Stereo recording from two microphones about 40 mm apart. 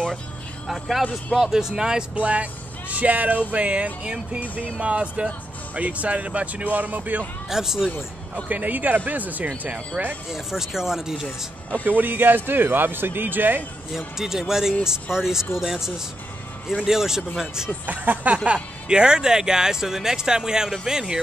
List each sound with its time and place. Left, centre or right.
0.7 s speech: centre
1.4 s speech: centre
2.1 s speech: right
7.4 s speech: centre
8.5 s speech: right
10.3 s speech: centre
11.8 s speech: right
13.9 s speech: centre
17.8 s speech: right
18.4 s speech: right